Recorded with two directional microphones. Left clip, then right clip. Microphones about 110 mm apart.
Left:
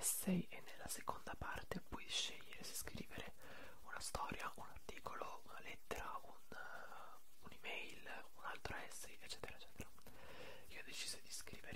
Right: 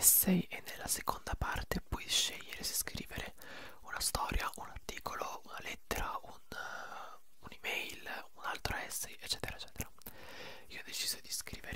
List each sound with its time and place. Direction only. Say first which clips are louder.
0.0 s whispering: right 12 dB; 35° right (ahead or behind)